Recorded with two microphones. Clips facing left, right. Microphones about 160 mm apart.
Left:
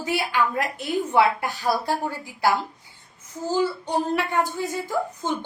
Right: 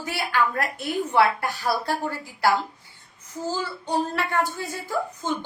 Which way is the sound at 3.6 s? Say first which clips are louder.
Left 5 dB; 20° left (ahead or behind).